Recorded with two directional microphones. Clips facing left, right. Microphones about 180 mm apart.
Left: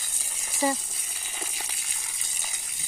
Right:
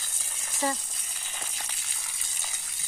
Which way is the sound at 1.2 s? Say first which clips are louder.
Left 3 dB; 10° left (ahead or behind).